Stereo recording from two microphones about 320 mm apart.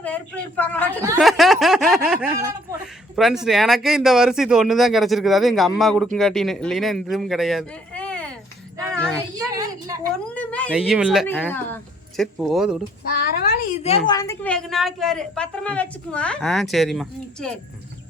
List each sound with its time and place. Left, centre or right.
0.0 s a woman's voice: centre
0.9 s a woman's voice: centre
8.9 s child singing: centre
9.6 s a sound: centre
10.3 s speech: centre
13.1 s a woman's voice: left; by 17.5 s centre